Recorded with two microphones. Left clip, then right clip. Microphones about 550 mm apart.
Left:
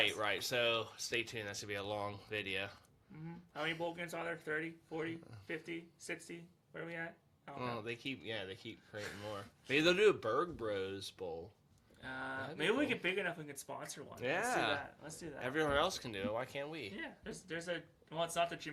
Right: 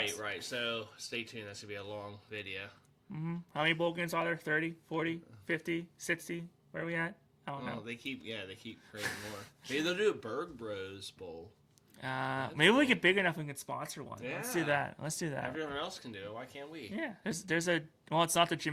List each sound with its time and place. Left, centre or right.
0.2 s speech: left
3.2 s speech: right
7.9 s speech: left
11.9 s speech: right
14.3 s speech: left
14.8 s speech: right
15.5 s speech: left
16.9 s speech: right